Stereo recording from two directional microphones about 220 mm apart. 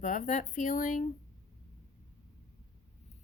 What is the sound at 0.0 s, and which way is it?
A woman's voice, 35° left (ahead or behind).